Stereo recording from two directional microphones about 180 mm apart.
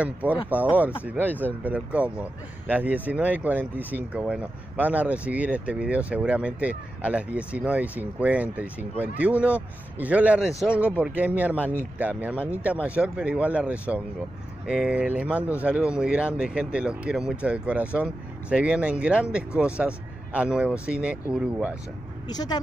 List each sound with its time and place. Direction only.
0.0 s speech: 10° right (ahead or behind)
22.3 s speech: 20° left (ahead or behind)